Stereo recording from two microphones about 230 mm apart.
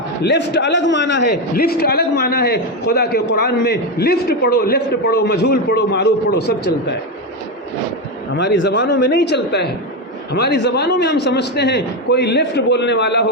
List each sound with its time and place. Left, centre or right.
0.2 s a man's voice: left
8.3 s a man's voice: left